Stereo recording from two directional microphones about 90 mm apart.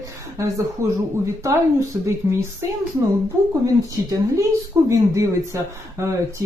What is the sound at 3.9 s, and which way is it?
Speech, 40° right (ahead or behind).